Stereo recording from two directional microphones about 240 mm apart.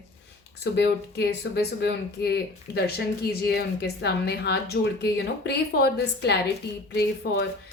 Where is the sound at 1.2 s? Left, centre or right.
Left.